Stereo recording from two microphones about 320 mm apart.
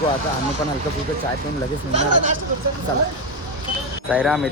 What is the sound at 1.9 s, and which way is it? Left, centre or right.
Speech, right.